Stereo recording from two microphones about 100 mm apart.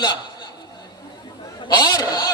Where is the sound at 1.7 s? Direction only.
40° left (ahead or behind).